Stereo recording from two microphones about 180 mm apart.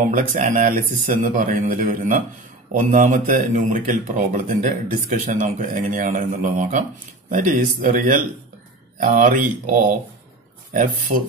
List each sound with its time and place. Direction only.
0.1 s speech: 45° right (ahead or behind)